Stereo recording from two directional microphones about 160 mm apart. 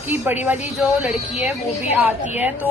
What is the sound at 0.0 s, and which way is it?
Speech, 10° right (ahead or behind).